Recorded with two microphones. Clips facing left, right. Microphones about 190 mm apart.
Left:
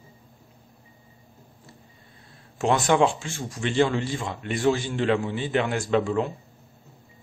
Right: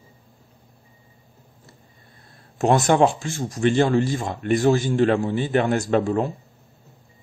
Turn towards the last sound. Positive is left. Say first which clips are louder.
# right 3 dB
turn(degrees=-40)  # may be behind; listen again after turning